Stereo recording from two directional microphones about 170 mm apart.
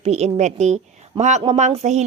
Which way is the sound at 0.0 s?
40° right (ahead or behind).